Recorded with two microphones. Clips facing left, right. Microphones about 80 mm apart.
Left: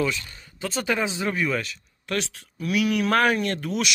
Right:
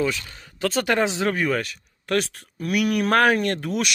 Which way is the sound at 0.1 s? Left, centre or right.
Right.